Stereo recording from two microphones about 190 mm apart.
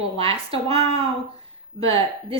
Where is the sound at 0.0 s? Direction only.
30° right (ahead or behind).